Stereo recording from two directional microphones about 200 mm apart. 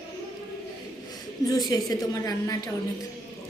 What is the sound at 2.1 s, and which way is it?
Speech, 20° left (ahead or behind).